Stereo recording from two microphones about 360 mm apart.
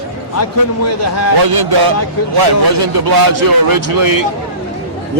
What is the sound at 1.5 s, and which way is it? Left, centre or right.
Speech, right.